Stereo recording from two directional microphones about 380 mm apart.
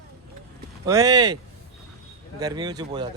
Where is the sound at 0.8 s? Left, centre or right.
Centre.